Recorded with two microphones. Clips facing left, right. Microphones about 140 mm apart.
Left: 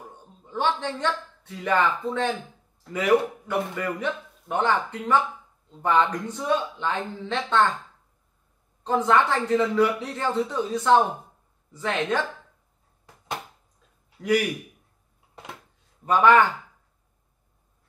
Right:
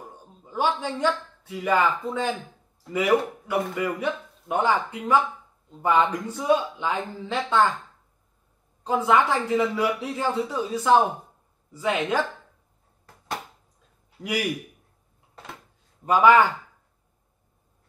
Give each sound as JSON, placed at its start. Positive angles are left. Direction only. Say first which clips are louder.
{"t": 0.5, "sound": "a man's voice", "louder": "even", "side_deg": -10}
{"t": 8.8, "sound": "a man's voice", "louder": "even", "side_deg": -10}
{"t": 14.2, "sound": "a man's voice", "louder": "left 8 dB", "side_deg": -20}
{"t": 16.1, "sound": "a man's voice", "louder": "right 1 dB", "side_deg": -10}